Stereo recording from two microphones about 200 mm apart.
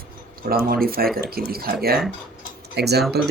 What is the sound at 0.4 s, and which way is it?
Speech, 50° right (ahead or behind).